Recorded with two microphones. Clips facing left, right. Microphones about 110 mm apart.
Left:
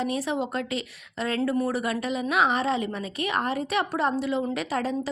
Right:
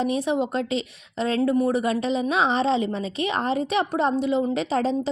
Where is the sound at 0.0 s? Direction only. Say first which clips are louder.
Right 4 dB; 20° right (ahead or behind).